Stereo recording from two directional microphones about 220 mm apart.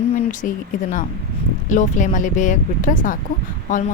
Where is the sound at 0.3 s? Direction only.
35° left (ahead or behind).